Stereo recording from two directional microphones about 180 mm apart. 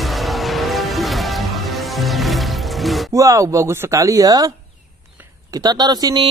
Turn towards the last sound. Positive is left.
turn(degrees=-25)  # may be behind; listen again after turning